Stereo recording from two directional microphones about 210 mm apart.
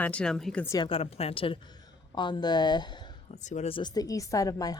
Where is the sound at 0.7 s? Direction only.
25° left (ahead or behind).